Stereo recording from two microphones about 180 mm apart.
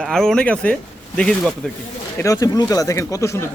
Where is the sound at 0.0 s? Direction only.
5° left (ahead or behind).